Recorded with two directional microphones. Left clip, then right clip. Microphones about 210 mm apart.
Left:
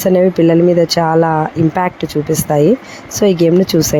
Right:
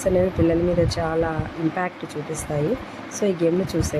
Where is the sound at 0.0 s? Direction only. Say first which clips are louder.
Left 9 dB; 40° left (ahead or behind).